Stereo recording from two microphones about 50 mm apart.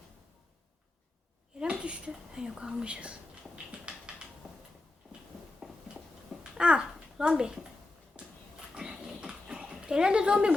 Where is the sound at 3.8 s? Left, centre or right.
Centre.